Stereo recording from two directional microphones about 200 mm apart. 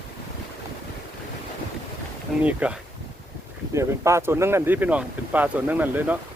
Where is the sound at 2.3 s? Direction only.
Centre (ahead or behind).